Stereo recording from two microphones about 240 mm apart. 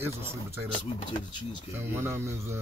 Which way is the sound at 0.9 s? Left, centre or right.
Centre.